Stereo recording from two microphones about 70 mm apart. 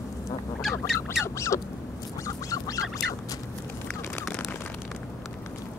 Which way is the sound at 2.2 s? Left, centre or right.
Left.